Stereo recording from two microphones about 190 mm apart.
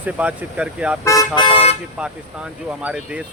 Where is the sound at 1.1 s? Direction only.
20° left (ahead or behind).